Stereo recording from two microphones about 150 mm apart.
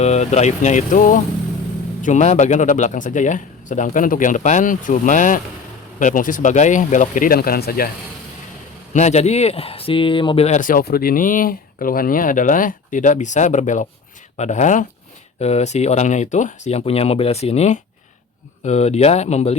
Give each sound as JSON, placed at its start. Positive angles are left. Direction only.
{"t": 0.0, "sound": "speech", "side_deg": 50}
{"t": 8.9, "sound": "speech", "side_deg": 50}